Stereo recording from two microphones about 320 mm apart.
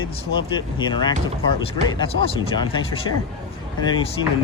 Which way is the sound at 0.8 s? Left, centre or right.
Centre.